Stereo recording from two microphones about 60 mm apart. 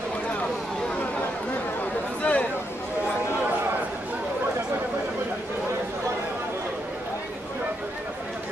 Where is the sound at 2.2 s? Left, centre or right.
Left.